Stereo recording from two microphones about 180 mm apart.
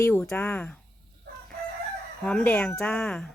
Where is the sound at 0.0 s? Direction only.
10° left (ahead or behind).